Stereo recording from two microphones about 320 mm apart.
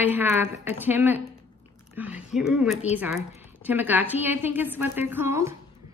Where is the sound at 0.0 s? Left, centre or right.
Centre.